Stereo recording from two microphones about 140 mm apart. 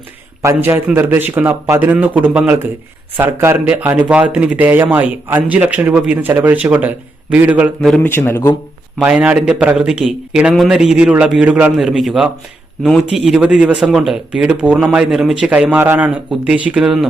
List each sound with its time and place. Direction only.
0.4 s speech: 20° right (ahead or behind)
7.9 s speech: 15° left (ahead or behind)
9.0 s a man's voice: 10° right (ahead or behind)